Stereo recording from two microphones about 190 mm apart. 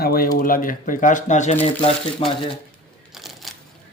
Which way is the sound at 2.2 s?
30° left (ahead or behind).